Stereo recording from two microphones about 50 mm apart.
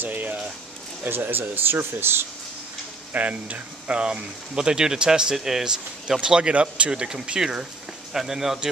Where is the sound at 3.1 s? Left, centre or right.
Right.